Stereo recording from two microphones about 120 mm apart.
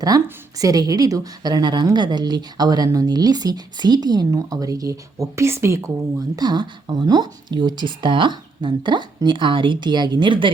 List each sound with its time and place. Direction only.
0.6 s a woman's voice: 30° right (ahead or behind)
6.3 s a woman's voice: 35° right (ahead or behind)